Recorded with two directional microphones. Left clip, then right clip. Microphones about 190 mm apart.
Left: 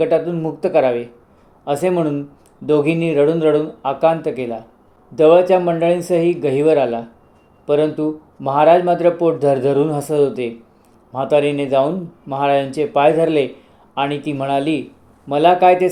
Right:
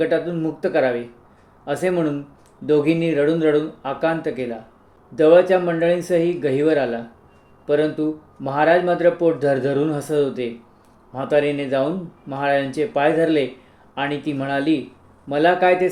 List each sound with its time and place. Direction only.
0.0 s speech: 15° left (ahead or behind)